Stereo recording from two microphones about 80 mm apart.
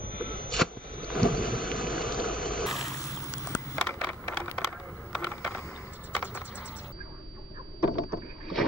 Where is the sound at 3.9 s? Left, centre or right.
Left.